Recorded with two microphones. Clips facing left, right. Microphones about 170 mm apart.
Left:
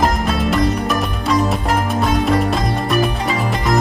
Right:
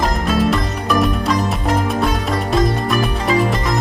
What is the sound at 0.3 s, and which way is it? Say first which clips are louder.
Music: even; centre (ahead or behind).